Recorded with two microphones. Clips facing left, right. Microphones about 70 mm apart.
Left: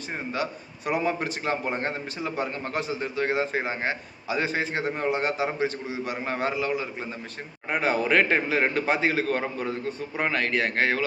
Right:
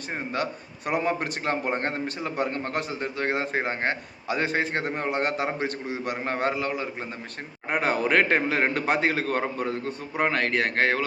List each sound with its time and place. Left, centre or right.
0.9 s a man's voice: right